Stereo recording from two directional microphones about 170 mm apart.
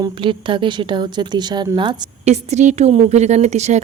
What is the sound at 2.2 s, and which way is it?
A woman's voice, 40° right (ahead or behind).